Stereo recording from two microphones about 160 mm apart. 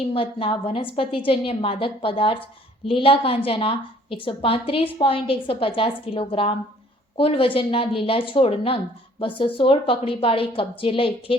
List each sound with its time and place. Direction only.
0.0 s a woman's voice: 35° left (ahead or behind)